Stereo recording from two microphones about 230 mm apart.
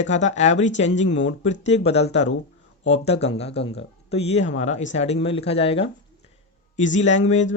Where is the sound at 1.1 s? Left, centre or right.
Left.